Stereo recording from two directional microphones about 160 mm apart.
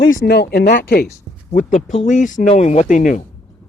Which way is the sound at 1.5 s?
50° left (ahead or behind).